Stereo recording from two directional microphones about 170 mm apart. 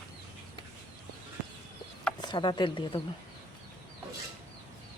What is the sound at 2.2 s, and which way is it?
Speech, 25° left (ahead or behind).